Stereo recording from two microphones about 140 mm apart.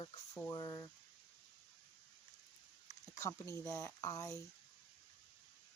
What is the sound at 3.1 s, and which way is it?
Speech, 25° left (ahead or behind).